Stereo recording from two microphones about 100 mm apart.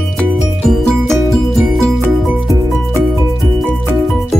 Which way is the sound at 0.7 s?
5° left (ahead or behind).